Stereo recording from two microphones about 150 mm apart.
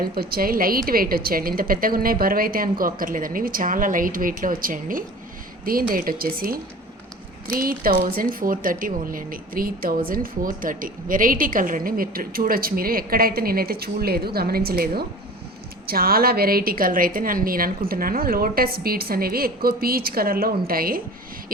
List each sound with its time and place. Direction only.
0.0 s a woman's voice: 85° right
7.6 s a woman's voice: 70° right (ahead or behind)